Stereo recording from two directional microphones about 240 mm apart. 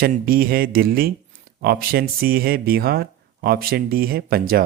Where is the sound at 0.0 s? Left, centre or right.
Right.